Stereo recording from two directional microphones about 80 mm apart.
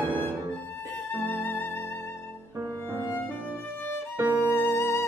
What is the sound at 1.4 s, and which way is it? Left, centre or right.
Music, left.